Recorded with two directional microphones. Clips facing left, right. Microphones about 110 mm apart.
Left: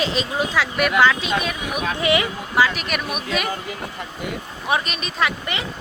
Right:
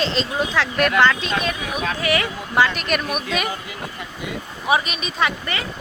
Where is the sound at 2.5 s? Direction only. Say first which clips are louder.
Right 1 dB; 5° left (ahead or behind).